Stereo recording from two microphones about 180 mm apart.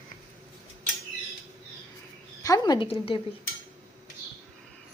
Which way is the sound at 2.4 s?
20° left (ahead or behind).